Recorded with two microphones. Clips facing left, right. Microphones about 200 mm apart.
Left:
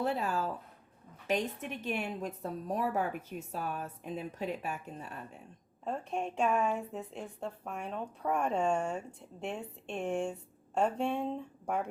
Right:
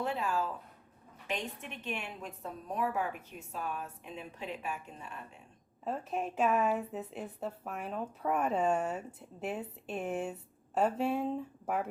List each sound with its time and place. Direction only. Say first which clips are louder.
0.0 s speech: left 1 dB; 40° left (ahead or behind)
1.8 s a woman's voice: left 5 dB; 40° left (ahead or behind)
5.8 s speech: even; 5° right (ahead or behind)